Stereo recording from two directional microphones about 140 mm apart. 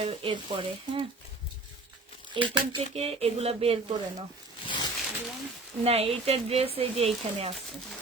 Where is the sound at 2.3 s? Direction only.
35° right (ahead or behind).